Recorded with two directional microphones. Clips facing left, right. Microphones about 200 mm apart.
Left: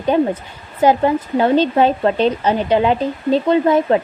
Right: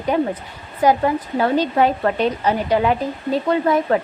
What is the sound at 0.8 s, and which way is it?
Speech, 25° left (ahead or behind).